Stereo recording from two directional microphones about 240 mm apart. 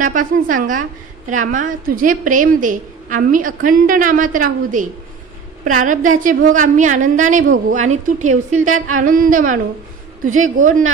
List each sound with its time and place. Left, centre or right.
0.0 s a woman's voice: right